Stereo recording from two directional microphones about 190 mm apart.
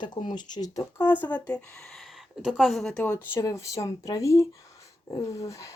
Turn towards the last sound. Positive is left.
turn(degrees=15)  # may be behind; listen again after turning